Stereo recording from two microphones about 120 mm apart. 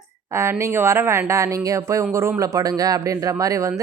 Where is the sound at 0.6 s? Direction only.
20° right (ahead or behind).